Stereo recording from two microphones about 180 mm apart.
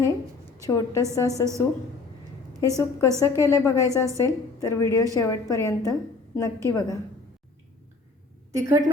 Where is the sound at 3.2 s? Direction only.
15° left (ahead or behind).